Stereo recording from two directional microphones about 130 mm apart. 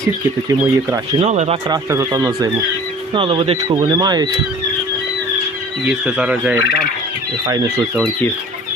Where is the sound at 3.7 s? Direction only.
30° right (ahead or behind).